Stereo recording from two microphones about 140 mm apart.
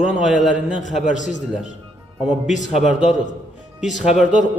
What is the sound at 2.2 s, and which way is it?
A man's voice, 5° right (ahead or behind).